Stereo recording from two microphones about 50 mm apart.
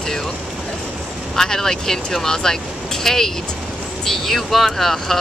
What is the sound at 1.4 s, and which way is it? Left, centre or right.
Speech, centre.